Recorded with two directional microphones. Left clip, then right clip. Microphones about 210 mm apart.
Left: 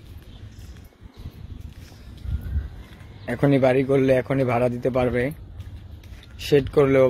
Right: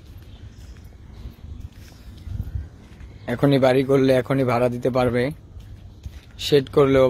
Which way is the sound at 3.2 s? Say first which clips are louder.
Right 1 dB; 20° right (ahead or behind).